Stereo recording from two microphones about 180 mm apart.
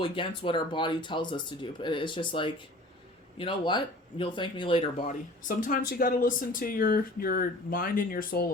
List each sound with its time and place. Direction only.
0.0 s speech: 25° left (ahead or behind)
5.0 s speech: 45° left (ahead or behind)